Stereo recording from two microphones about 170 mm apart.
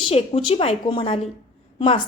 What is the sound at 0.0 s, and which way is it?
A woman's voice, 35° left (ahead or behind).